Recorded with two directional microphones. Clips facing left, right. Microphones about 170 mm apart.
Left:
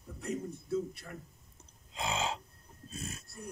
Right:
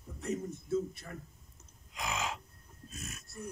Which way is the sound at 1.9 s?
30° left (ahead or behind).